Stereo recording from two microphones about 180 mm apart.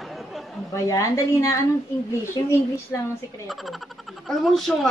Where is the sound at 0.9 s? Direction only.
15° left (ahead or behind).